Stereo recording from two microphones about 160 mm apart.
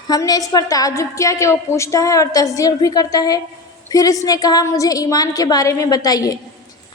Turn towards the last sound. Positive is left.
turn(degrees=25)  # may be behind; listen again after turning